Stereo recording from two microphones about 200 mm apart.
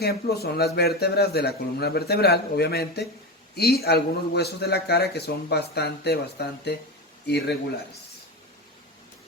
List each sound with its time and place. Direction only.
0.0 s a man's voice: 50° left (ahead or behind)